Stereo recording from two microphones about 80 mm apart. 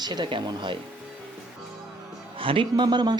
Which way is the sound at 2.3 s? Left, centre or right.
Right.